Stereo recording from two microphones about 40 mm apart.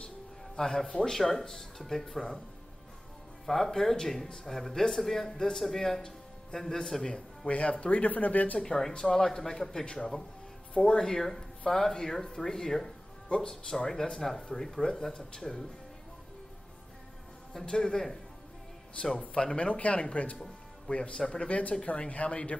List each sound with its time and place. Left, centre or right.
0.6 s speech: centre
0.8 s speech: centre
1.1 s speech: centre
3.4 s speech: centre
7.4 s speech: left
9.0 s speech: centre
13.3 s speech: left
17.6 s speech: centre
19.1 s speech: left